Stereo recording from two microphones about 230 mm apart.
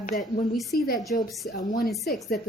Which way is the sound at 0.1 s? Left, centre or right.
Centre.